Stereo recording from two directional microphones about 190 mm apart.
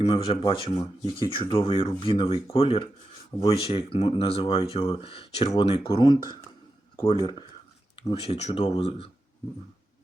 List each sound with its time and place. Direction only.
0.3 s speech: 30° left (ahead or behind)